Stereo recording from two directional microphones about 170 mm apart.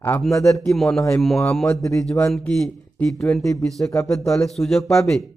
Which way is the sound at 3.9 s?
20° left (ahead or behind).